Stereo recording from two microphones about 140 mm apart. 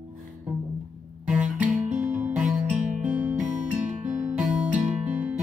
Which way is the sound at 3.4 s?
65° right (ahead or behind).